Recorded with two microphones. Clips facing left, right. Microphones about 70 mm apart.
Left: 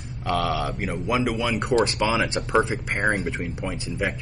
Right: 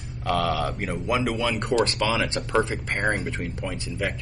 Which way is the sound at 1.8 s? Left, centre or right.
Centre.